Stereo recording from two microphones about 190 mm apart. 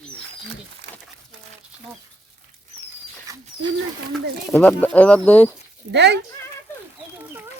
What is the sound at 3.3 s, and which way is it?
Dog, 20° right (ahead or behind).